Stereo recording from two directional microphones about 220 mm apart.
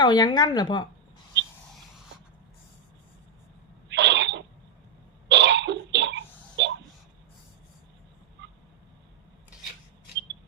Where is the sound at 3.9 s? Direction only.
55° right (ahead or behind).